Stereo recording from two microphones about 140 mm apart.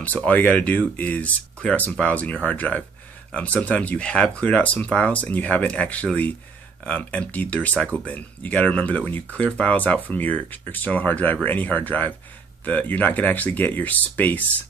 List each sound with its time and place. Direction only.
0.0 s speech: 10° left (ahead or behind)